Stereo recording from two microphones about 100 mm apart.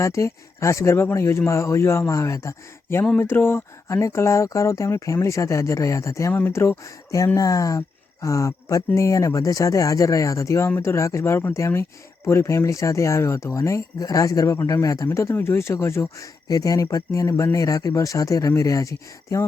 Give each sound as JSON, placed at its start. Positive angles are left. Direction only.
{"t": 0.0, "sound": "speech", "side_deg": 30}